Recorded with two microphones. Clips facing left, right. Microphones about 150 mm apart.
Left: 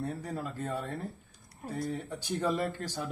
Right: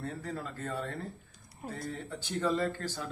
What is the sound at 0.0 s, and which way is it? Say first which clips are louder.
Speech: left 2 dB; 15° left (ahead or behind).